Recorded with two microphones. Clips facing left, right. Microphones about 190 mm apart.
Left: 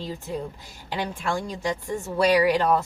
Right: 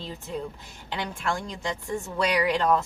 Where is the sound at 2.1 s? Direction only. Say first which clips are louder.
Left 6 dB; 35° left (ahead or behind).